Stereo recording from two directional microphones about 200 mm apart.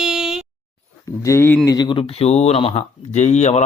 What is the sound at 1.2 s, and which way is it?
Speech, 10° left (ahead or behind).